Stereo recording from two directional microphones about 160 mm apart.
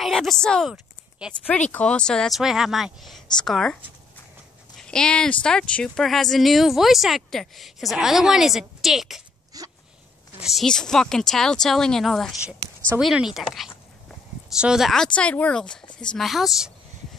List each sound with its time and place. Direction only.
0.0 s speech: centre (ahead or behind)
4.7 s speech: 5° left (ahead or behind)
9.5 s dog: 25° right (ahead or behind)
10.4 s speech: centre (ahead or behind)